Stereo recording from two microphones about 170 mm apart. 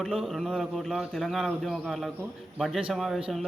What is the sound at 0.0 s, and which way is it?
A man's voice, centre (ahead or behind).